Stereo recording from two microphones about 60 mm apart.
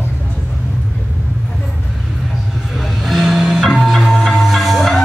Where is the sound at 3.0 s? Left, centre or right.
Centre.